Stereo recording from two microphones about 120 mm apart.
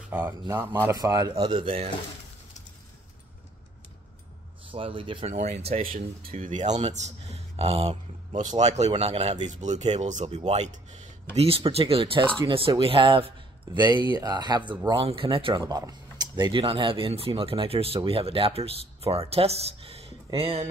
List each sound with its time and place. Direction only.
0.1 s speech: 15° right (ahead or behind)
0.9 s speech: 30° right (ahead or behind)
1.4 s speech: 45° right (ahead or behind)
4.6 s speech: 50° right (ahead or behind)
5.4 s speech: 55° right (ahead or behind)
5.9 s speech: 90° right; by 8.4 s 55° right (ahead or behind)
8.4 s speech: 80° right
11.3 s speech: 55° right (ahead or behind); by 14.6 s 35° right (ahead or behind)
14.9 s speech: 50° right (ahead or behind)
15.6 s speech: 30° right (ahead or behind); by 20.6 s 50° right (ahead or behind)